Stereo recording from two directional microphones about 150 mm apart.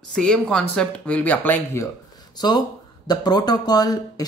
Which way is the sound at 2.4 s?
25° left (ahead or behind).